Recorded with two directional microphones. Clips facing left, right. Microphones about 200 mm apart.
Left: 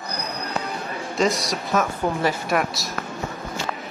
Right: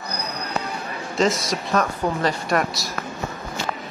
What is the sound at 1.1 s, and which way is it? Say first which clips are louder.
A woman's voice: right 1 dB; centre (ahead or behind).